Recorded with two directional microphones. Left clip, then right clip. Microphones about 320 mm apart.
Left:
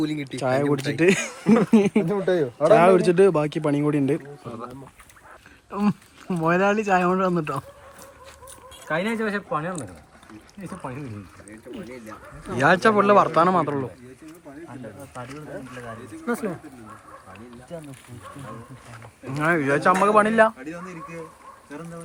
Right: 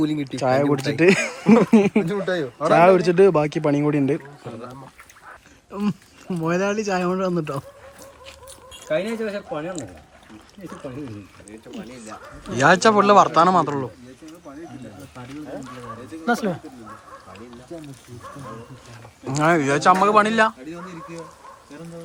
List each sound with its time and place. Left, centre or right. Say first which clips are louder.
0.0 s speech: right 4 dB; right
0.3 s speech: right 3 dB; centre
2.0 s speech: left 2 dB; left
2.6 s speech: right 1 dB; centre
5.7 s speech: left 2 dB; centre
8.9 s speech: right 1 dB; centre
12.5 s speech: right 3 dB; centre
16.2 s speech: right 5 dB; right
19.2 s speech: right 4 dB; centre